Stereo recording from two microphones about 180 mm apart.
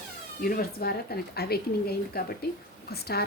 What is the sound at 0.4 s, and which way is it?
Speech, 55° left (ahead or behind).